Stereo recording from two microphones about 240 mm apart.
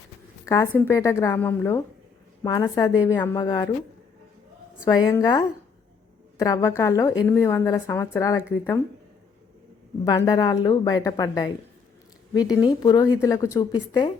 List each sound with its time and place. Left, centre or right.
0.4 s a woman's voice: centre
4.9 s a woman's voice: centre
6.4 s a woman's voice: centre
10.0 s a woman's voice: centre